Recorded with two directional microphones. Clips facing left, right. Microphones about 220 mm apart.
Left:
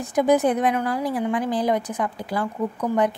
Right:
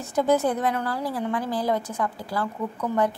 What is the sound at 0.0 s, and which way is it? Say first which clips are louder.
A woman's voice: left 3 dB; 15° left (ahead or behind).